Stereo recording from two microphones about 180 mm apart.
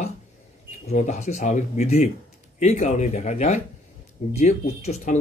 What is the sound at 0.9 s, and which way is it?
Speech, 40° left (ahead or behind).